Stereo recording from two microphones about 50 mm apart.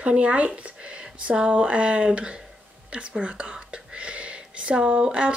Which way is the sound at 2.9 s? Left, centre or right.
Centre.